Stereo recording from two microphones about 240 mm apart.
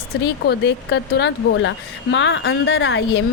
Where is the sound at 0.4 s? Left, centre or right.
Left.